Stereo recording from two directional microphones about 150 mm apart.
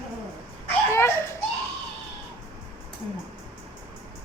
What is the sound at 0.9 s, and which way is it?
Children playing, 15° left (ahead or behind).